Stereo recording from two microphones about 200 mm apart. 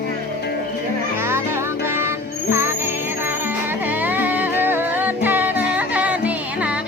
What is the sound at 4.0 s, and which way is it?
Music, 10° right (ahead or behind).